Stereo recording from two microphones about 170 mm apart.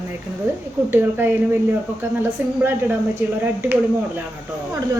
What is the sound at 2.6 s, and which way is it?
A woman's voice, 10° right (ahead or behind).